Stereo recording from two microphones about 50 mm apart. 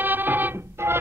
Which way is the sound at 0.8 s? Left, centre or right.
Right.